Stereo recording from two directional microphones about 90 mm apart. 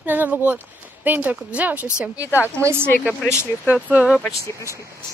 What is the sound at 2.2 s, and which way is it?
Speech, 25° left (ahead or behind).